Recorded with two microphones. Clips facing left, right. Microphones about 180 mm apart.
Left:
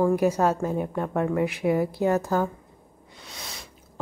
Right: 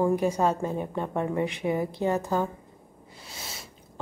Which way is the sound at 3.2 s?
5° right (ahead or behind).